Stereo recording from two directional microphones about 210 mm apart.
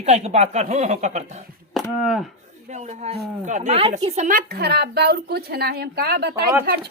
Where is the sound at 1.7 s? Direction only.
Centre (ahead or behind).